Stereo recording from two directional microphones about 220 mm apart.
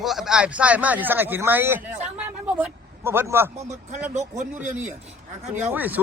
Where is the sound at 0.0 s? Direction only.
Centre (ahead or behind).